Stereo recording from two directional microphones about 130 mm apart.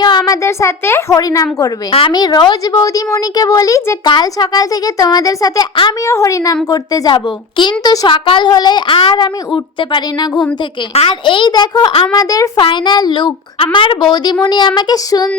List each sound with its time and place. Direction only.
0.0 s a sound: 30° left (ahead or behind)
0.4 s a woman's voice: 20° left (ahead or behind)
1.9 s a woman's voice: 40° left (ahead or behind); by 3.9 s 25° left (ahead or behind)
4.0 s speech: 35° left (ahead or behind)
6.1 s a woman's voice: 25° left (ahead or behind)